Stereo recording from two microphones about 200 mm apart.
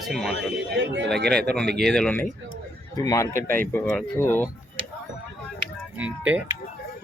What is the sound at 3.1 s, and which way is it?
Speech, 15° left (ahead or behind).